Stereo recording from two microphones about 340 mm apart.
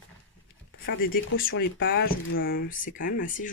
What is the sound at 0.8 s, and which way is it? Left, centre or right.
Speech, left.